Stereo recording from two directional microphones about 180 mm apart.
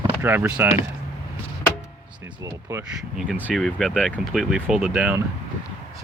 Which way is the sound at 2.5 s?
15° right (ahead or behind).